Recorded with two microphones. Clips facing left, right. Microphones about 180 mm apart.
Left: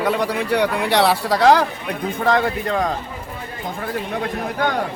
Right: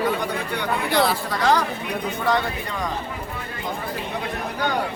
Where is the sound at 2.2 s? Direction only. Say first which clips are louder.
Left 6 dB; 55° left (ahead or behind).